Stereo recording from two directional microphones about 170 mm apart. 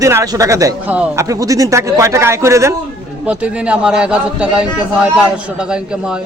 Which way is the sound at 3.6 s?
5° right (ahead or behind).